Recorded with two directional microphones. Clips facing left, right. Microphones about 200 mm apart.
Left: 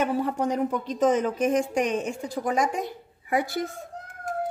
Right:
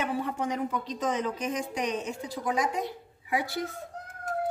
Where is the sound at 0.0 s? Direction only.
40° left (ahead or behind).